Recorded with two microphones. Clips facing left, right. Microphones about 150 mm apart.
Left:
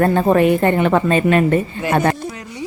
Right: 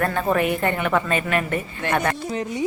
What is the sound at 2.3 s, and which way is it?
Music, 20° right (ahead or behind).